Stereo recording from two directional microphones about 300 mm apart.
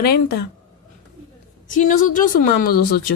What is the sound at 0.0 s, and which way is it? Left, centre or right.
Speech, left.